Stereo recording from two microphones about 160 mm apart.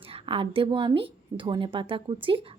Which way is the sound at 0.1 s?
35° right (ahead or behind).